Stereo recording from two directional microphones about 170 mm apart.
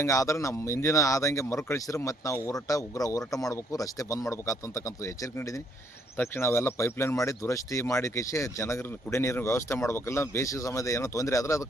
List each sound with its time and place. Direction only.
0.0 s speech: 15° left (ahead or behind)